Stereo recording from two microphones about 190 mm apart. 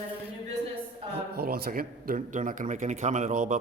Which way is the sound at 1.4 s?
55° right (ahead or behind).